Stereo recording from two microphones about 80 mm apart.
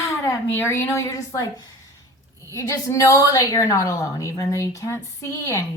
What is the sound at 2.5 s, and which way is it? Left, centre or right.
A woman's voice, left.